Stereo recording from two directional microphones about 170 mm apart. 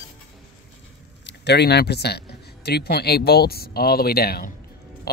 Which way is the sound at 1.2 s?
80° left.